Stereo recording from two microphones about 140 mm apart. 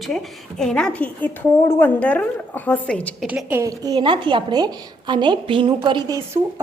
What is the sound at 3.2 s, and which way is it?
Speech, 10° right (ahead or behind).